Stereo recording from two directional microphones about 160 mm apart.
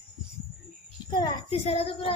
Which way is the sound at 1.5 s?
40° left (ahead or behind).